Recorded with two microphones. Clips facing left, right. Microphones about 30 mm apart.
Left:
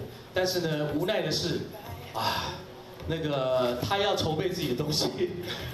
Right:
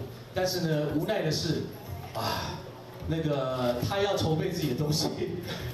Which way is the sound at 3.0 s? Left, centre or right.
Left.